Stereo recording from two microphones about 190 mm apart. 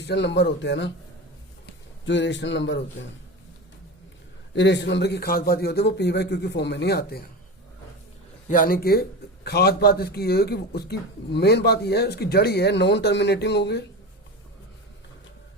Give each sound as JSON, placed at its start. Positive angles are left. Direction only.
{"t": 0.0, "sound": "speech", "side_deg": 65}
{"t": 2.0, "sound": "speech", "side_deg": 70}
{"t": 4.5, "sound": "a man's voice", "side_deg": 65}
{"t": 8.4, "sound": "a man's voice", "side_deg": 45}